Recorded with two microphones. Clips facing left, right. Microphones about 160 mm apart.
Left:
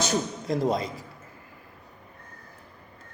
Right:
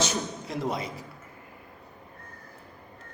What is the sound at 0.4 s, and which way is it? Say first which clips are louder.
Speech: left 6 dB; 40° left (ahead or behind).